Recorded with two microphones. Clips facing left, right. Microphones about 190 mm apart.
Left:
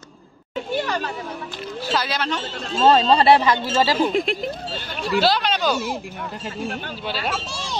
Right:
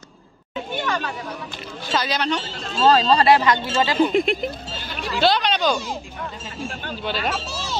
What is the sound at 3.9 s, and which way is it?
Speech, centre (ahead or behind).